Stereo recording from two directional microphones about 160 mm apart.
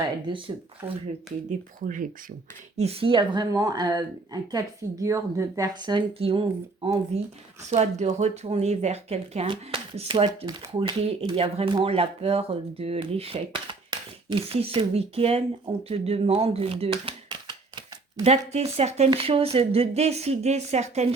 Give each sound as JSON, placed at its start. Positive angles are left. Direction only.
{"t": 0.3, "sound": "speech", "side_deg": -30}
{"t": 0.8, "sound": "speech", "side_deg": -15}
{"t": 2.7, "sound": "a woman's voice", "side_deg": -40}
{"t": 18.2, "sound": "speech", "side_deg": -40}